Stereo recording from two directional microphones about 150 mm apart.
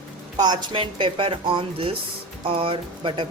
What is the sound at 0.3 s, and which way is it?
Speech, 30° right (ahead or behind).